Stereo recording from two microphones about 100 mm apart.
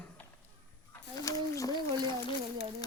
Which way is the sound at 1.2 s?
35° left (ahead or behind).